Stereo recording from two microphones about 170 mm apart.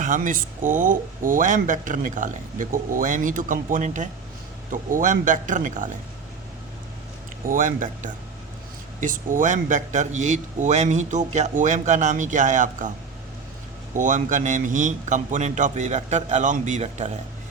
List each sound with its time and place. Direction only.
0.0 s speech: 50° right (ahead or behind)
7.4 s speech: 50° right (ahead or behind)
13.9 s speech: 50° right (ahead or behind)